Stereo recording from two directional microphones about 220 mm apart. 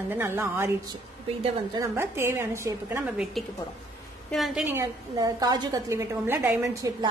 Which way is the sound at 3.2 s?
Centre (ahead or behind).